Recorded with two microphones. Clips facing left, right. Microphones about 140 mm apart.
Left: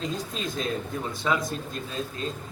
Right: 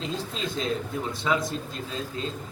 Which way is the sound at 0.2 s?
25° right (ahead or behind).